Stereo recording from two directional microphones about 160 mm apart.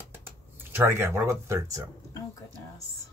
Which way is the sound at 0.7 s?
15° right (ahead or behind).